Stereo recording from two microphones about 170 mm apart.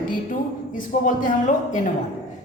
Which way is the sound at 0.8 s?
50° left (ahead or behind).